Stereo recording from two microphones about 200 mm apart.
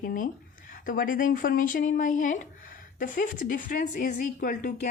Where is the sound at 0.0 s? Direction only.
45° left (ahead or behind).